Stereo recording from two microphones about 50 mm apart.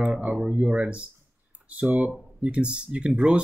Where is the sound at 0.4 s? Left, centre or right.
Right.